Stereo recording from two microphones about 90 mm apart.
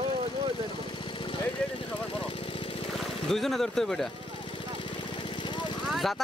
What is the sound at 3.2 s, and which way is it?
Speech, 5° left (ahead or behind).